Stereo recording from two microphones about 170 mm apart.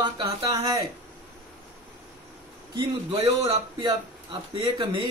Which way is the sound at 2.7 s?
35° right (ahead or behind).